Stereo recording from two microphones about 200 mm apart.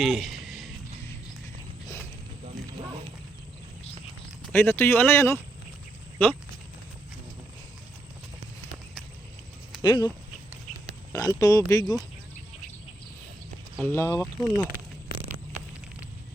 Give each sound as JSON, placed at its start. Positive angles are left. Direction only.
{"t": 0.0, "sound": "speech", "side_deg": 0}
{"t": 0.4, "sound": "a sound", "side_deg": 0}
{"t": 4.5, "sound": "speech", "side_deg": 10}
{"t": 9.8, "sound": "speech", "side_deg": 20}
{"t": 11.1, "sound": "speech", "side_deg": 15}
{"t": 13.7, "sound": "speech", "side_deg": 10}